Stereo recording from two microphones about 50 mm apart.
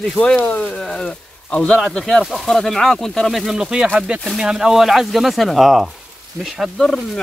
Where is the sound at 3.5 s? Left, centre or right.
Centre.